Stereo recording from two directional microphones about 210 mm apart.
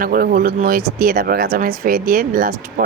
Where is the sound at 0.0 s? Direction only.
45° right (ahead or behind).